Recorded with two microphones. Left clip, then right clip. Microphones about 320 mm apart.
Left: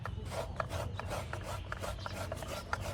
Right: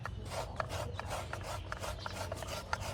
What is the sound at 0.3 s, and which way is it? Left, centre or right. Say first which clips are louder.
Filing: left 1 dB; centre.